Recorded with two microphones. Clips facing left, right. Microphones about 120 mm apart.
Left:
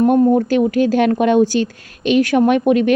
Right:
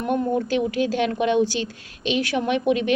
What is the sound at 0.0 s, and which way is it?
A woman's voice, 40° left (ahead or behind).